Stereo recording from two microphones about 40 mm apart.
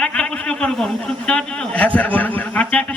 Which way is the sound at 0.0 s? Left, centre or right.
Left.